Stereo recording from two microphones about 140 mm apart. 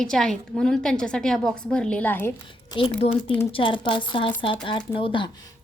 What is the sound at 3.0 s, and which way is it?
Speech, 40° left (ahead or behind).